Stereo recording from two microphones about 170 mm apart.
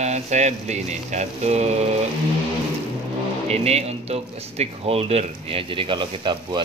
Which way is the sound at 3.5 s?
40° right (ahead or behind).